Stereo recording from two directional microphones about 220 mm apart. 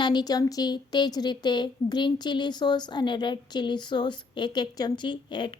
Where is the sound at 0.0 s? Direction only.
20° left (ahead or behind).